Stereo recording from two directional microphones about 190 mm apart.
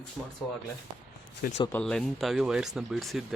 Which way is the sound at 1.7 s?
5° left (ahead or behind).